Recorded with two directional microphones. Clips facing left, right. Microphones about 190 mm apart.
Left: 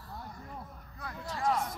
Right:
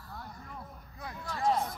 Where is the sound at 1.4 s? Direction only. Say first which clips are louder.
Right 2 dB; 25° right (ahead or behind).